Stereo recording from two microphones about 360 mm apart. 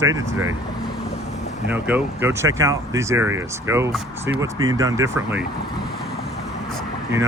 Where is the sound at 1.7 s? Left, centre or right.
Centre.